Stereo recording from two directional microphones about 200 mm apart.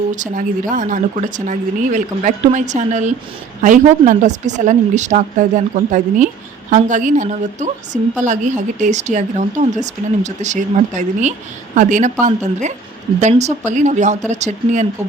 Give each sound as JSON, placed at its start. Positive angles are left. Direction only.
{"t": 0.7, "sound": "speech", "side_deg": -40}